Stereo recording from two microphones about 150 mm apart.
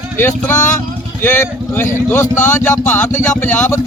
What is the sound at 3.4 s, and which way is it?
Speech, 15° left (ahead or behind).